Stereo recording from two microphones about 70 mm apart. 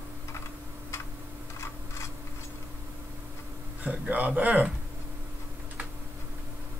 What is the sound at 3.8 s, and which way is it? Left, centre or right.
Speech, right.